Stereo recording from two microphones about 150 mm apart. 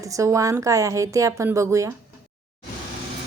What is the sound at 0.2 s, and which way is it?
Speech, 20° right (ahead or behind).